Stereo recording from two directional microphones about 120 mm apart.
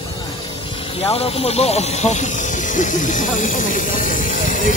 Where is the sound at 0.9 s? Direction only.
55° left (ahead or behind).